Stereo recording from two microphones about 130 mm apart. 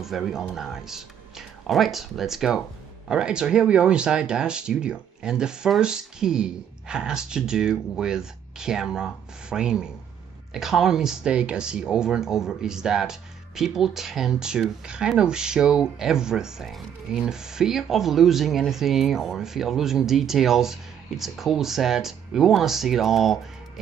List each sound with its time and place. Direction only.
0.0 s speech: centre (ahead or behind)